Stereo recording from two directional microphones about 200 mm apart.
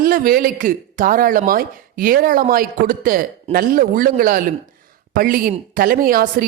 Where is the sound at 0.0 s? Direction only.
45° right (ahead or behind).